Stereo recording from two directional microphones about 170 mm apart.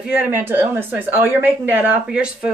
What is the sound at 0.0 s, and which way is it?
Speech, 10° right (ahead or behind).